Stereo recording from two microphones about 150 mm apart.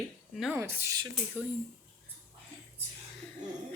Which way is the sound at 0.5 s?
15° right (ahead or behind).